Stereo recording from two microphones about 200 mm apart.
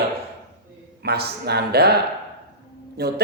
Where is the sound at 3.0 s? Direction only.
55° right (ahead or behind).